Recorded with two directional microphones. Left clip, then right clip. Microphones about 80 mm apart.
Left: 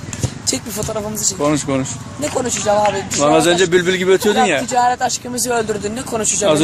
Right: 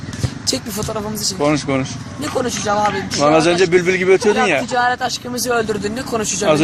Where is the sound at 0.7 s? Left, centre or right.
Centre.